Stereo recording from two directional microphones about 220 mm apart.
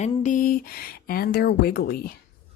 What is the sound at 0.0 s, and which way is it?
Speech, 35° left (ahead or behind).